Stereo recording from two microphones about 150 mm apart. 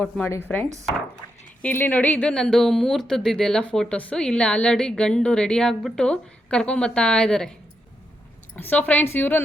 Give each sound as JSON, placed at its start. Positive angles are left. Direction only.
{"t": 0.4, "sound": "speech", "side_deg": 10}
{"t": 1.2, "sound": "dog", "side_deg": 30}
{"t": 1.6, "sound": "speech", "side_deg": 15}
{"t": 8.5, "sound": "speech", "side_deg": 15}